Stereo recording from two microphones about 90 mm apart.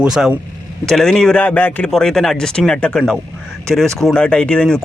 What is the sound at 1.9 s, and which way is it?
Speech, 5° left (ahead or behind).